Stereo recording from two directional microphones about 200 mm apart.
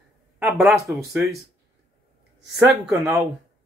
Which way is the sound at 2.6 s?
10° right (ahead or behind).